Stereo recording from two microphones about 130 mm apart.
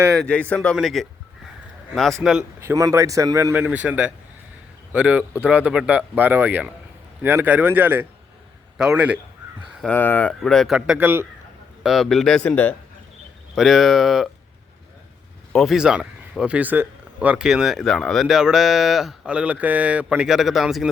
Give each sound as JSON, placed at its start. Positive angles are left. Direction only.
{"t": 0.2, "sound": "a man's voice", "side_deg": 10}
{"t": 2.6, "sound": "speech", "side_deg": -25}
{"t": 9.8, "sound": "speech", "side_deg": 15}
{"t": 11.8, "sound": "speech", "side_deg": 0}
{"t": 13.6, "sound": "speech", "side_deg": 0}
{"t": 15.5, "sound": "speech", "side_deg": 0}